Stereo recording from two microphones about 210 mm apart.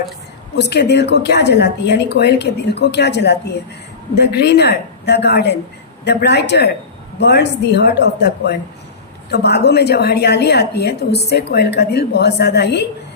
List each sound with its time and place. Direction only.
0.5 s a woman's voice: 50° left (ahead or behind)